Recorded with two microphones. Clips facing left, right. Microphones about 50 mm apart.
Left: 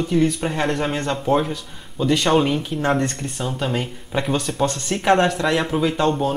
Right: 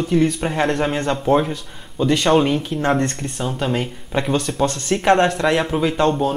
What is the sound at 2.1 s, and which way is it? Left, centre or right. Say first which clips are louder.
Speech: right 2 dB; centre.